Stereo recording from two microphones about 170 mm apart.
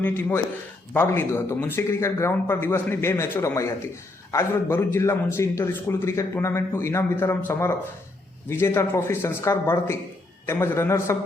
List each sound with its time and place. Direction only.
0.0 s a man's voice: 10° left (ahead or behind)